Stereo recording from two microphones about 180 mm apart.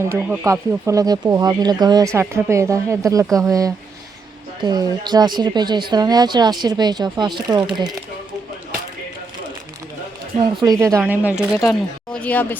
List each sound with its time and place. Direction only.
0.1 s speech: 15° right (ahead or behind)
10.6 s speech: 20° right (ahead or behind)
11.7 s speech: 5° left (ahead or behind)